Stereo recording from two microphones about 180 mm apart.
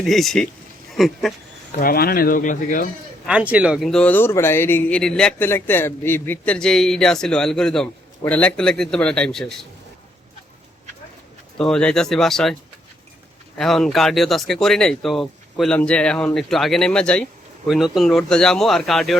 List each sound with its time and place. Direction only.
0.0 s speech: centre (ahead or behind)
1.8 s speech: 55° left (ahead or behind)
3.2 s speech: 5° right (ahead or behind)
11.5 s speech: 5° left (ahead or behind)
13.6 s speech: centre (ahead or behind)